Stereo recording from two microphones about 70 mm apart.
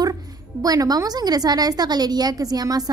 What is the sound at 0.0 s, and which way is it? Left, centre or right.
Speech, right.